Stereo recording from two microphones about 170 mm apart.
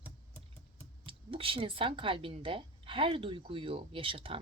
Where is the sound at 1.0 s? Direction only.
30° right (ahead or behind).